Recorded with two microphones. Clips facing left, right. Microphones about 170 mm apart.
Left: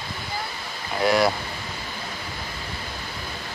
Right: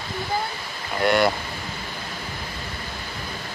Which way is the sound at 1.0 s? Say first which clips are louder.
Even; centre (ahead or behind).